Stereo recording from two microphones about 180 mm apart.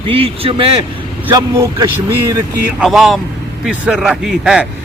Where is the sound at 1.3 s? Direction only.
20° right (ahead or behind).